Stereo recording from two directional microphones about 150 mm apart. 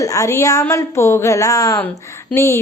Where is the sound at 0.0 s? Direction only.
20° left (ahead or behind).